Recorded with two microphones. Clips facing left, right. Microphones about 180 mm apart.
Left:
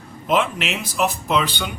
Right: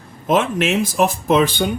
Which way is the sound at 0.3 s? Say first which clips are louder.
Right 4 dB; 45° right (ahead or behind).